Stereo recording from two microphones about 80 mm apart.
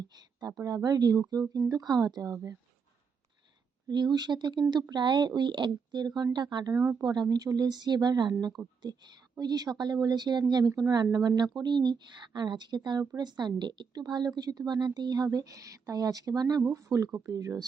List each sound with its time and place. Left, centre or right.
0.6 s speech: right
3.8 s a woman's voice: right
16.7 s speech: right